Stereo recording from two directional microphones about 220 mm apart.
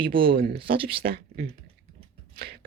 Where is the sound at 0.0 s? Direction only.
40° right (ahead or behind).